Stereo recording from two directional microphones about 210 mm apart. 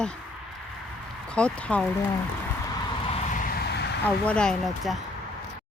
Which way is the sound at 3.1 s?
35° left (ahead or behind).